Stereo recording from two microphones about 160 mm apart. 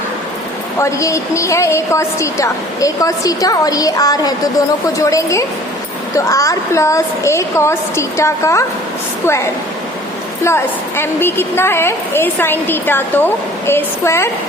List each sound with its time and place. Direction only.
0.8 s a woman's voice: 20° left (ahead or behind)
10.4 s a woman's voice: 15° left (ahead or behind)